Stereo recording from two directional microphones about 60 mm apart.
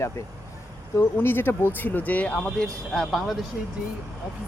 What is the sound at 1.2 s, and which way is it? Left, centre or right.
Speech, left.